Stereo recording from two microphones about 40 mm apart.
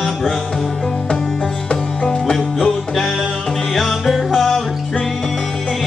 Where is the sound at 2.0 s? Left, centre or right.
Centre.